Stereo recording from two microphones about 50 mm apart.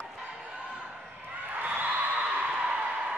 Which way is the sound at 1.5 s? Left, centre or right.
Right.